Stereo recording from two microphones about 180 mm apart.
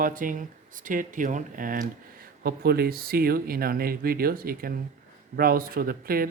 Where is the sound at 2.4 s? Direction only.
60° right (ahead or behind).